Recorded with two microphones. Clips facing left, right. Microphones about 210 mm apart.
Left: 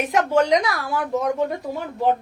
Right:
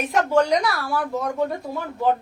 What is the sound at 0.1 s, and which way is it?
Speech, 20° left (ahead or behind).